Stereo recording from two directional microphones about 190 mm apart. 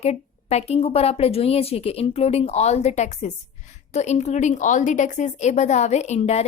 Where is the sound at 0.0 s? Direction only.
35° left (ahead or behind).